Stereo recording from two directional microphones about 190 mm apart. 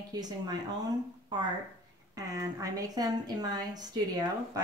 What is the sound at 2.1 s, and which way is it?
A woman's voice, 20° right (ahead or behind).